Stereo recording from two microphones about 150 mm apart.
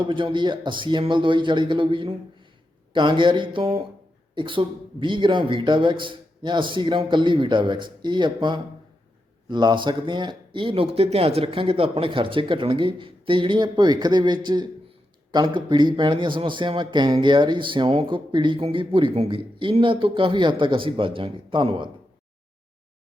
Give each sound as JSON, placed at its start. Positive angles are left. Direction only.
{"t": 0.0, "sound": "a man's voice", "side_deg": -35}